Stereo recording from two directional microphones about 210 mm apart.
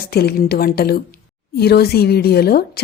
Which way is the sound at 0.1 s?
50° left (ahead or behind).